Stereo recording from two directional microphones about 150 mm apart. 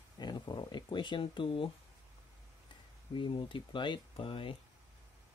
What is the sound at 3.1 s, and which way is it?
Speech, 35° left (ahead or behind).